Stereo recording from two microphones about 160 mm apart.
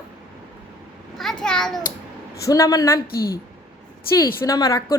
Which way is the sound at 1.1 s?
5° left (ahead or behind).